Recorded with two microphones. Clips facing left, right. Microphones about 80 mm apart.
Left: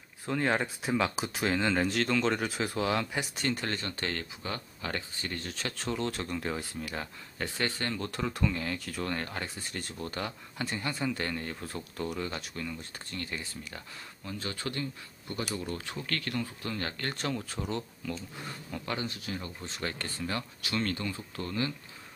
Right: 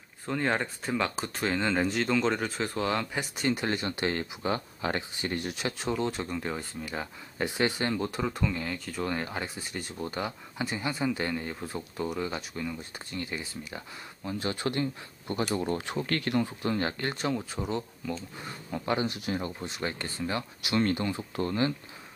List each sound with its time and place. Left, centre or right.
0.3 s speech: centre
7.3 s speech: centre
14.2 s speech: right
17.1 s speech: centre
18.7 s speech: right
19.6 s speech: centre
20.3 s speech: centre